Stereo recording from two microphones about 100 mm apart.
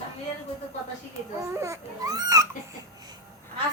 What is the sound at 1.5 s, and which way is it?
Speech, 30° right (ahead or behind).